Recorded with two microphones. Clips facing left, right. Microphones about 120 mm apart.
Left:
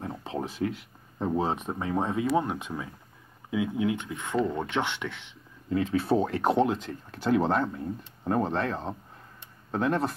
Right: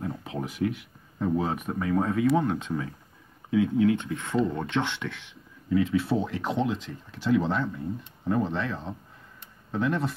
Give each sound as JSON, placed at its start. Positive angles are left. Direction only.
{"t": 0.0, "sound": "speech", "side_deg": 30}
{"t": 5.7, "sound": "speech", "side_deg": 35}
{"t": 6.0, "sound": "speech", "side_deg": 50}